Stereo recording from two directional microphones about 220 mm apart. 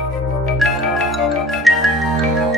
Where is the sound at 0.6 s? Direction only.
Centre (ahead or behind).